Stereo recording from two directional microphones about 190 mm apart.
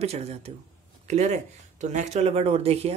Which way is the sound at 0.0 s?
35° right (ahead or behind).